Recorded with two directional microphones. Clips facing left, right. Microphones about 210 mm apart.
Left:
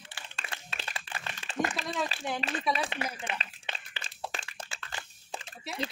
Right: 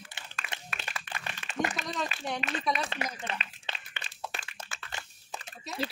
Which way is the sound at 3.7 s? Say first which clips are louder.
Left 1 dB; 35° left (ahead or behind).